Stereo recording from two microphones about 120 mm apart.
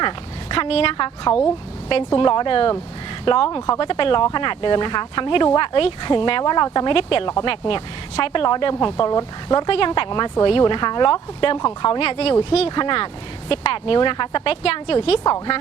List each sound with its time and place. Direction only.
0.0 s speech: 45° left (ahead or behind)